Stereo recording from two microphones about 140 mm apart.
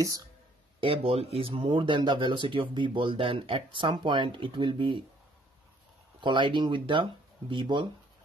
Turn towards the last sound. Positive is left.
turn(degrees=-35)  # may be behind; listen again after turning